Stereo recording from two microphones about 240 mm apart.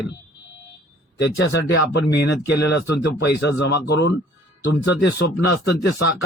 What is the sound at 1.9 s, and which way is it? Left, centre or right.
Speech, left.